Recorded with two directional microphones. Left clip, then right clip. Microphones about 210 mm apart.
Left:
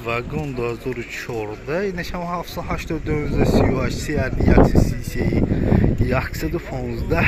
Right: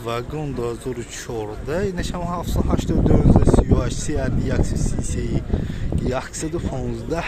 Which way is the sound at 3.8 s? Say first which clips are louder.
Left 2 dB; 5° right (ahead or behind).